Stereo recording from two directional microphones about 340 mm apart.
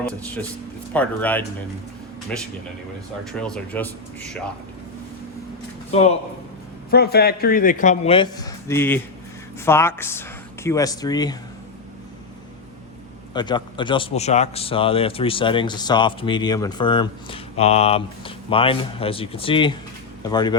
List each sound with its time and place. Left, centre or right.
0.9 s speech: centre
5.9 s a man's voice: centre
13.3 s speech: centre